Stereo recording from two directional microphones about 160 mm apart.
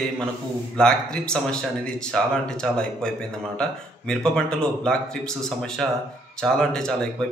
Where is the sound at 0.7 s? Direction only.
5° left (ahead or behind).